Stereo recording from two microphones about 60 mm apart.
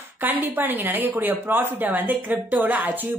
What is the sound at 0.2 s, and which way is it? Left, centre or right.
Speech, right.